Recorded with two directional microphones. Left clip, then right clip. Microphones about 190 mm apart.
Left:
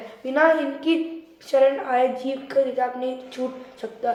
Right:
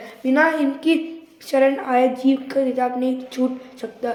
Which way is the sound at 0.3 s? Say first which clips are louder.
Right 1 dB; 45° right (ahead or behind).